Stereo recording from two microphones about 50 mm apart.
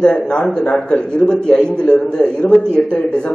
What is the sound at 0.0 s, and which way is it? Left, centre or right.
A man's voice, centre.